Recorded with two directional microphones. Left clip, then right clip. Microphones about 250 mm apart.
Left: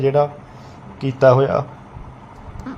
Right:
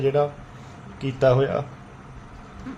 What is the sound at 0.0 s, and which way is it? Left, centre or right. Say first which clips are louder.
Speech: left 5 dB; centre.